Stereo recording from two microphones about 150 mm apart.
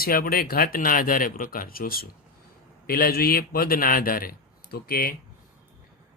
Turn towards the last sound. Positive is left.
turn(degrees=80)